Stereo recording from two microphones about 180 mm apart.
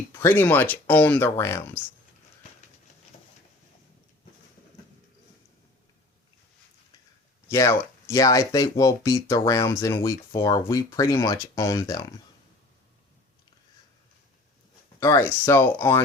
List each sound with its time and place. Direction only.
0.1 s speech: 10° left (ahead or behind)
7.4 s speech: 15° left (ahead or behind)
15.0 s speech: 15° left (ahead or behind)